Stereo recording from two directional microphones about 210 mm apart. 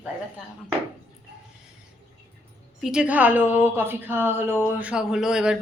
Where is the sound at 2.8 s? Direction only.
5° right (ahead or behind).